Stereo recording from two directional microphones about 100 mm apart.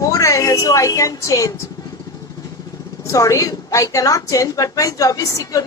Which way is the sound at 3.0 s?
30° left (ahead or behind).